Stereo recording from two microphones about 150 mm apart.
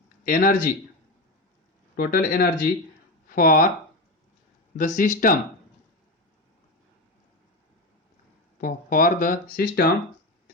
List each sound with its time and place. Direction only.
0.3 s speech: 70° left (ahead or behind)
2.0 s speech: 70° left (ahead or behind)
4.8 s speech: 60° left (ahead or behind)
8.6 s speech: 65° left (ahead or behind)